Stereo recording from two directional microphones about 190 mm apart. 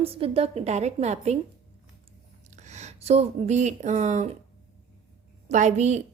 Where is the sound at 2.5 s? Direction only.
35° right (ahead or behind).